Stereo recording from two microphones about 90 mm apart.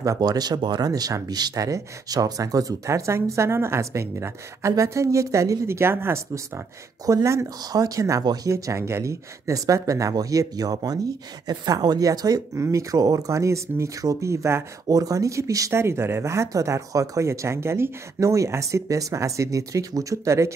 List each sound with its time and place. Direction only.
0.0 s speech: 45° right (ahead or behind)